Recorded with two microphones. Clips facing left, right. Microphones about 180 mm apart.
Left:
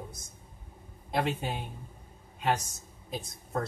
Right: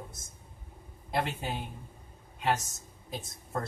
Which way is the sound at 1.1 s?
Centre (ahead or behind).